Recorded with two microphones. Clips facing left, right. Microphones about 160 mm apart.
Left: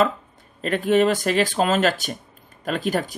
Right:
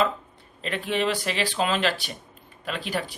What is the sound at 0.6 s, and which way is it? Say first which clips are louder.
Speech: left 8 dB; 45° left (ahead or behind).